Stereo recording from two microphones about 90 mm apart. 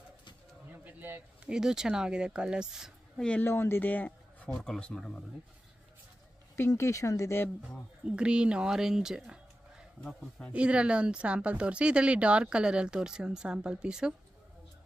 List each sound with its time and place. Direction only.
0.8 s a sound: 20° right (ahead or behind)
1.5 s speech: 5° right (ahead or behind)
3.2 s speech: 10° left (ahead or behind)
3.4 s speech: 25° left (ahead or behind); by 5.2 s 5° left (ahead or behind)
6.5 s speech: 30° left (ahead or behind)
8.0 s speech: 10° right (ahead or behind)